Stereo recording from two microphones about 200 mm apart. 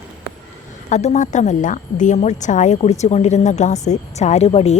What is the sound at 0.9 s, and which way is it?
A woman's voice, 35° left (ahead or behind).